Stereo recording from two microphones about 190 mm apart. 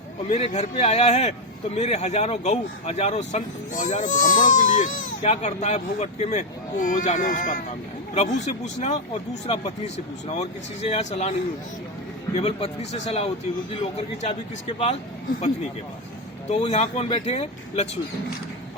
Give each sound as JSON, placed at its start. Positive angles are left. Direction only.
{"t": 0.3, "sound": "a man's voice", "side_deg": 35}
{"t": 12.4, "sound": "a man's voice", "side_deg": 30}
{"t": 16.5, "sound": "a man's voice", "side_deg": 35}